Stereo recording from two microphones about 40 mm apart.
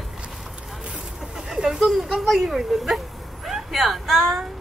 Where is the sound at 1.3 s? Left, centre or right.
Centre.